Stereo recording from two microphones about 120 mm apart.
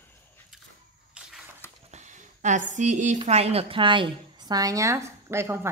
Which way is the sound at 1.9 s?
90° right.